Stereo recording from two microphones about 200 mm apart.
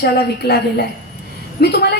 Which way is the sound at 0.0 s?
55° left (ahead or behind).